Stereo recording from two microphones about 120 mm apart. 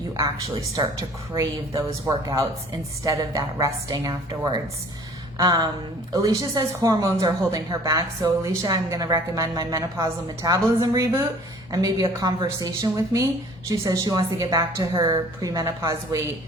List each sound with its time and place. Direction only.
0.2 s a woman's voice: 30° right (ahead or behind)